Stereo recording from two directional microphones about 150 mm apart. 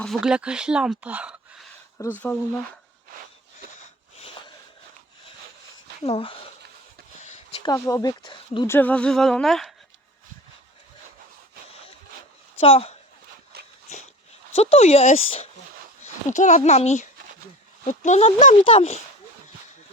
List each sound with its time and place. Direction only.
0.0 s speech: centre (ahead or behind)
2.0 s speech: 15° left (ahead or behind)
6.0 s speech: 40° left (ahead or behind)
7.6 s speech: 25° left (ahead or behind)
8.6 s speech: 15° left (ahead or behind)
12.5 s speech: 40° left (ahead or behind)
13.5 s a sound: 90° right
13.9 s a sound: 50° left (ahead or behind)
14.5 s speech: 45° left (ahead or behind)
16.3 s speech: 55° left (ahead or behind)
18.6 s speech: 40° left (ahead or behind)